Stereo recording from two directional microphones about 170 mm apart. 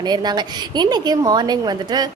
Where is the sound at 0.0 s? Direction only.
25° right (ahead or behind).